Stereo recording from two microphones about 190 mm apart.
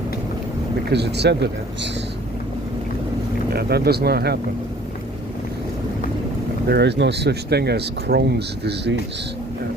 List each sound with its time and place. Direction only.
0.9 s speech: 60° right (ahead or behind)
3.5 s speech: 55° right (ahead or behind)
6.7 s speech: 60° right (ahead or behind)